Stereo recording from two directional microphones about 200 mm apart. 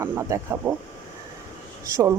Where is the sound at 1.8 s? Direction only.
15° right (ahead or behind).